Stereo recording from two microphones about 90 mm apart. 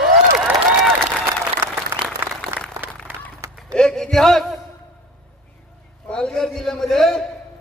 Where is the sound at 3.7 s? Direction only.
10° left (ahead or behind).